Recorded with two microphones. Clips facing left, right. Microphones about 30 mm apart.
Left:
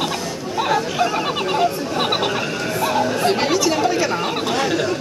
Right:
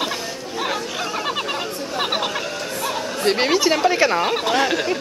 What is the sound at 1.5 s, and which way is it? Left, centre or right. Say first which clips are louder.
Speech: left 6 dB; centre.